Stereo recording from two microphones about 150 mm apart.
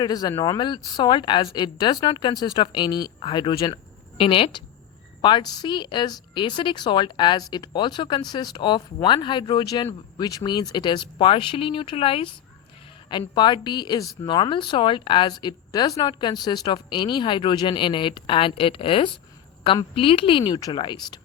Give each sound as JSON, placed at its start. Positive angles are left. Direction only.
{"t": 0.0, "sound": "a woman's voice", "side_deg": 25}